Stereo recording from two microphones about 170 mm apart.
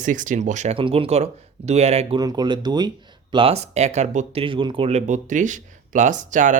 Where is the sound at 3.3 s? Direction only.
35° right (ahead or behind).